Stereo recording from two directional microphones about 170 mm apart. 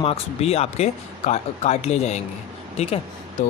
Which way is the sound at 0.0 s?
35° left (ahead or behind).